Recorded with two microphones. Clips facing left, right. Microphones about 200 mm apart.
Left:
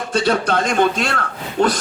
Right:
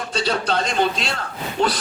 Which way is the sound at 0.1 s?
50° left (ahead or behind).